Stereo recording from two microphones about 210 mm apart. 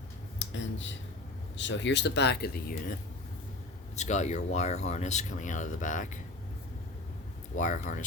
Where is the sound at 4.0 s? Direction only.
35° left (ahead or behind).